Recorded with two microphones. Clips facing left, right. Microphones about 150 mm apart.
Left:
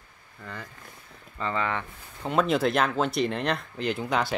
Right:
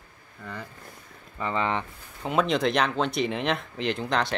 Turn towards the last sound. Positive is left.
turn(degrees=5)  # may be behind; listen again after turning